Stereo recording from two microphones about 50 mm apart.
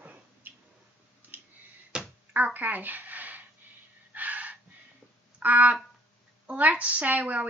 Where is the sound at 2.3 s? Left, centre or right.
Right.